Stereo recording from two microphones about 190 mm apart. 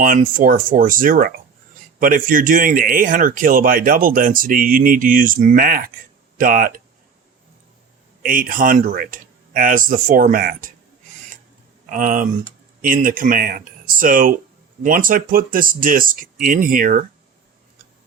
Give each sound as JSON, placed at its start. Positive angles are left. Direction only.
{"t": 0.0, "sound": "a man's voice", "side_deg": -45}
{"t": 8.2, "sound": "a man's voice", "side_deg": -45}
{"t": 11.9, "sound": "a man's voice", "side_deg": -45}